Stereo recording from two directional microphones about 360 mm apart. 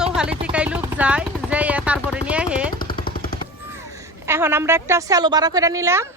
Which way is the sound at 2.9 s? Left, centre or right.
Left.